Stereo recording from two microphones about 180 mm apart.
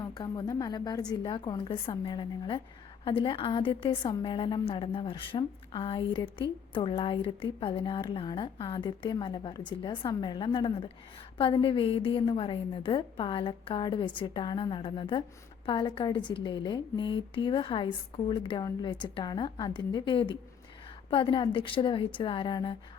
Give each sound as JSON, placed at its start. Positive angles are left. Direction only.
{"t": 0.0, "sound": "speech", "side_deg": 25}